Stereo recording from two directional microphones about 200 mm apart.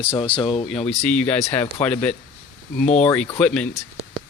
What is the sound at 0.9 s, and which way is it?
Speech, 5° left (ahead or behind).